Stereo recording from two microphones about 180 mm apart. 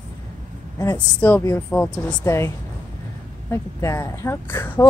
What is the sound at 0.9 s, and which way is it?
Speech, 10° left (ahead or behind).